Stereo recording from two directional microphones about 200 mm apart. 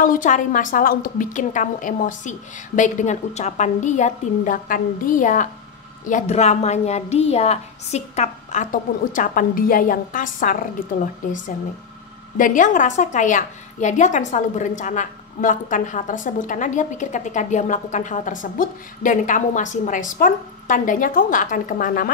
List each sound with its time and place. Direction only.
0.0 s a woman's voice: 40° left (ahead or behind)
12.4 s a woman's voice: 40° left (ahead or behind)